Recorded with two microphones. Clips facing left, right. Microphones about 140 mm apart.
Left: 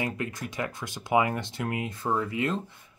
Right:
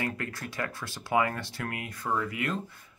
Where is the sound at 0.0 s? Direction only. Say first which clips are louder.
Left 2 dB; 20° left (ahead or behind).